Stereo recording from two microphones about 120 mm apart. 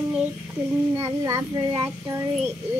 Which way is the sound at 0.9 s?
25° right (ahead or behind).